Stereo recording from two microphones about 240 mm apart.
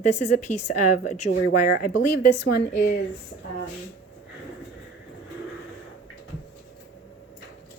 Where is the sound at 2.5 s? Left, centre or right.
Left.